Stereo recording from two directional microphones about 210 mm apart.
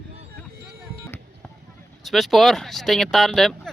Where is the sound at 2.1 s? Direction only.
Centre (ahead or behind).